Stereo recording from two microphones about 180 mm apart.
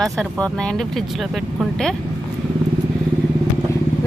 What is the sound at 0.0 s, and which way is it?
Speech, 5° left (ahead or behind).